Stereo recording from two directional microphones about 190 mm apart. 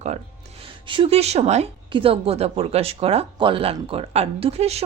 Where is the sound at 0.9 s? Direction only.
30° right (ahead or behind).